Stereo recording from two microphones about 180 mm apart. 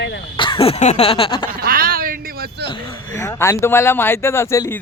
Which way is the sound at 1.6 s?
55° right (ahead or behind).